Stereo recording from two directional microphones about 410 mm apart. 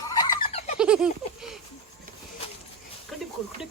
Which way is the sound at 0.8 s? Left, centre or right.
Centre.